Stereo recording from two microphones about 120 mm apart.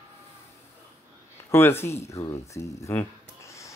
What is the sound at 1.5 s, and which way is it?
Speech, 20° left (ahead or behind).